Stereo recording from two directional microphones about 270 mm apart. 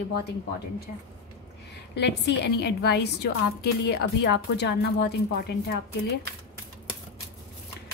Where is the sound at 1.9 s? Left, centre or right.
Left.